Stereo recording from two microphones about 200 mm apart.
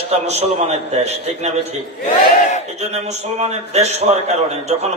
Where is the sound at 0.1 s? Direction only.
30° right (ahead or behind).